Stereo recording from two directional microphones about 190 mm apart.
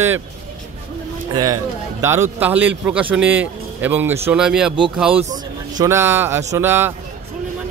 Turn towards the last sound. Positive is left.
turn(degrees=-10)  # may be behind; listen again after turning